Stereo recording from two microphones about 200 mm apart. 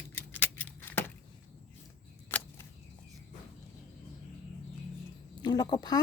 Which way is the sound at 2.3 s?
10° left (ahead or behind).